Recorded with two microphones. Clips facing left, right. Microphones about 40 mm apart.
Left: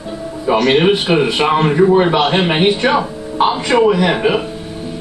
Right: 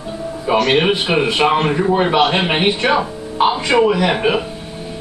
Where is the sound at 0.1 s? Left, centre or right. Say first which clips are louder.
Left 2 dB; centre.